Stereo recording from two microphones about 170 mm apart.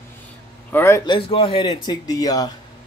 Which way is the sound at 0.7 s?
15° left (ahead or behind).